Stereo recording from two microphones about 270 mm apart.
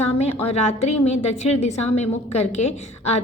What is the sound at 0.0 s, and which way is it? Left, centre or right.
A woman's voice, left.